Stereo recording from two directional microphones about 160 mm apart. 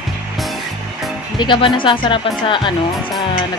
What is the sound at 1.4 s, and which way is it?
Speech, 30° left (ahead or behind).